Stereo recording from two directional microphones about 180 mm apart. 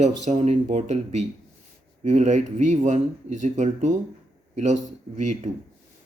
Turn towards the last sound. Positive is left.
turn(degrees=-40)  # may be behind; listen again after turning